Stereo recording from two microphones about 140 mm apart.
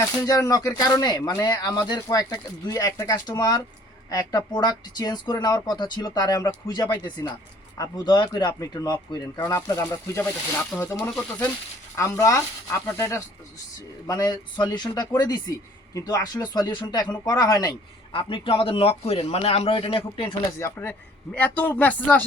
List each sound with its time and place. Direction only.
0.0 s speech: 25° left (ahead or behind)
18.1 s a man's voice: 35° left (ahead or behind)
20.6 s speech: 15° left (ahead or behind)